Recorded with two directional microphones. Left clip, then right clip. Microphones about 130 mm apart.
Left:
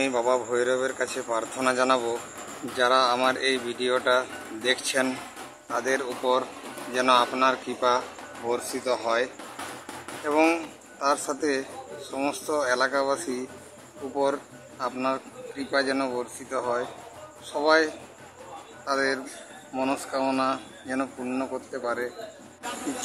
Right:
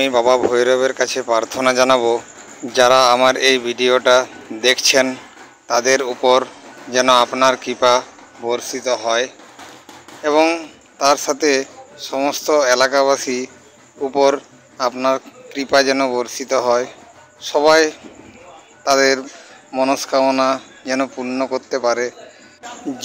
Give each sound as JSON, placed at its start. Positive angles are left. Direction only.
{"t": 0.0, "sound": "speech", "side_deg": -40}
{"t": 8.5, "sound": "speech", "side_deg": -20}
{"t": 11.0, "sound": "a man's voice", "side_deg": -30}
{"t": 19.7, "sound": "speech", "side_deg": -20}
{"t": 20.3, "sound": "a man's voice", "side_deg": -35}